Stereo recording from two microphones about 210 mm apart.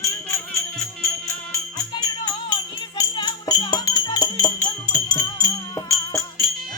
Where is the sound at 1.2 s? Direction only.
15° left (ahead or behind).